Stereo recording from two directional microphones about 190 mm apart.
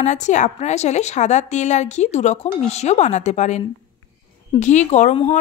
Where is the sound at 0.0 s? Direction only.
40° left (ahead or behind).